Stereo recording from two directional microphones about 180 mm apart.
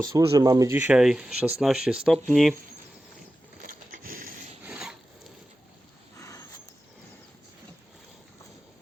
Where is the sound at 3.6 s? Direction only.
50° right (ahead or behind).